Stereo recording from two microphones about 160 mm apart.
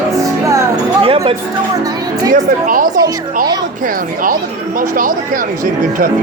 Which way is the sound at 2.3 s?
60° right (ahead or behind).